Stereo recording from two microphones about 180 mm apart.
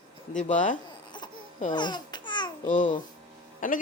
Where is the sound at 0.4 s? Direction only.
45° left (ahead or behind).